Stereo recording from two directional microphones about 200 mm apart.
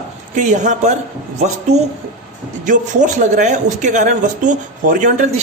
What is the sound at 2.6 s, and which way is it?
A man's voice, 40° right (ahead or behind).